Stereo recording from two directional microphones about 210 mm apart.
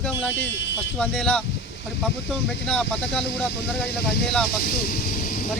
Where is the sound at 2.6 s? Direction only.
5° left (ahead or behind).